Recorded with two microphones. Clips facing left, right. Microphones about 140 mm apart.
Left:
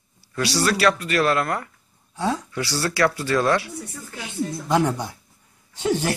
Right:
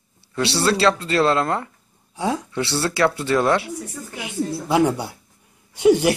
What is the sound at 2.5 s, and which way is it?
A woman's voice, 25° right (ahead or behind).